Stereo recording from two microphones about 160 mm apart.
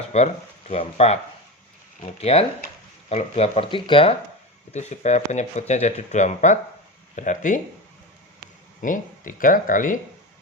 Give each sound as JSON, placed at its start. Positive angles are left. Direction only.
{"t": 0.1, "sound": "speech", "side_deg": 40}
{"t": 4.7, "sound": "speech", "side_deg": 45}
{"t": 8.8, "sound": "speech", "side_deg": 55}